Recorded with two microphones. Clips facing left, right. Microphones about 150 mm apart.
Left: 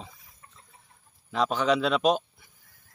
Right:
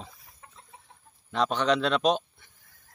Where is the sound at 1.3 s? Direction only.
5° left (ahead or behind).